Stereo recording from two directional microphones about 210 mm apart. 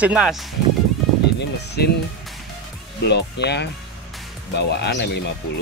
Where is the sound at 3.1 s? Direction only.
55° left (ahead or behind).